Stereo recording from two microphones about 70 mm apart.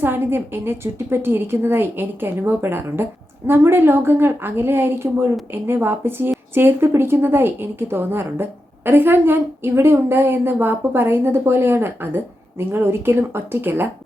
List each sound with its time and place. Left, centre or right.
0.0 s a woman's voice: right